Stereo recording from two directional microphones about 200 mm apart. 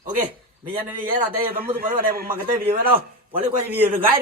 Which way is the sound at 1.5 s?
45° right (ahead or behind).